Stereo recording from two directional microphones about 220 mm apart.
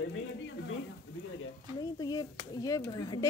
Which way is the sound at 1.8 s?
15° left (ahead or behind).